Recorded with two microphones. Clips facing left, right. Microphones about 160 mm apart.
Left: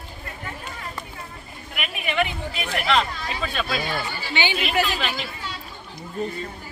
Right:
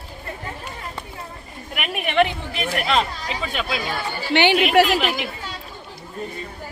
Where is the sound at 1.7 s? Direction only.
55° right (ahead or behind).